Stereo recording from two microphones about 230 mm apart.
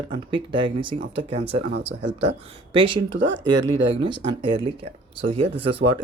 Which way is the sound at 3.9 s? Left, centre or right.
Centre.